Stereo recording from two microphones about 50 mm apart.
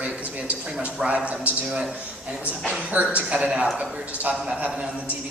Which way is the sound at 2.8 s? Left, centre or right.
Right.